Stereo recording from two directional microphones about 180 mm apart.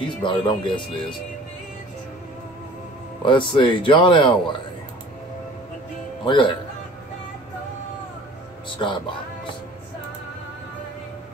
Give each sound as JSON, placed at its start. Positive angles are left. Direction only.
{"t": 0.0, "sound": "speech", "side_deg": 25}
{"t": 3.2, "sound": "speech", "side_deg": 25}
{"t": 6.2, "sound": "speech", "side_deg": 25}
{"t": 8.6, "sound": "speech", "side_deg": 25}